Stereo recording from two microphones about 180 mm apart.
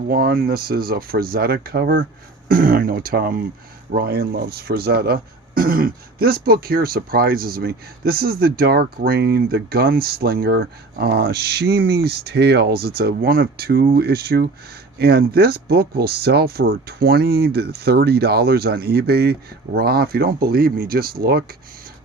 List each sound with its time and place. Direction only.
0.1 s speech: 55° right (ahead or behind)
2.5 s speech: 50° right (ahead or behind)